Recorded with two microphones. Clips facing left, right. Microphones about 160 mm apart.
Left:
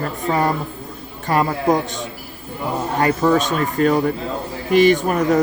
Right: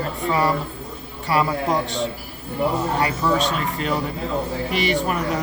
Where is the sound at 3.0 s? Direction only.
45° left (ahead or behind).